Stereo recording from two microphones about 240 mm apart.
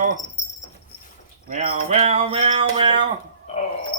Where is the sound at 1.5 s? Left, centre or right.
Right.